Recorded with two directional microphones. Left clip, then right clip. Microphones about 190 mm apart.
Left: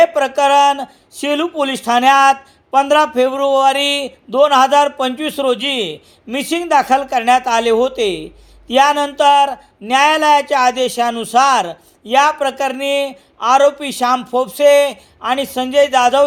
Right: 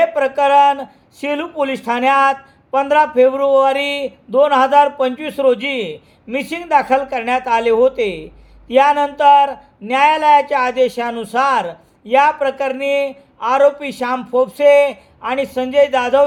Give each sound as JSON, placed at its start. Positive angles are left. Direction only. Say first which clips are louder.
{"t": 0.0, "sound": "speech", "louder": "left 2 dB", "side_deg": 25}